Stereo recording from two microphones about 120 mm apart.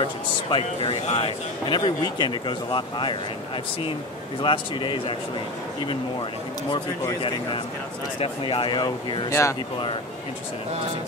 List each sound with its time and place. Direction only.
0.0 s speech: 45° left (ahead or behind)
1.7 s speech: 40° left (ahead or behind)
4.4 s speech: 45° left (ahead or behind)
6.7 s speech: 40° left (ahead or behind)
9.3 s speech: 25° left (ahead or behind)